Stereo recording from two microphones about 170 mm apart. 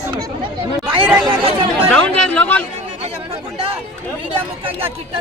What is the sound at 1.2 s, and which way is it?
Speech, 30° right (ahead or behind).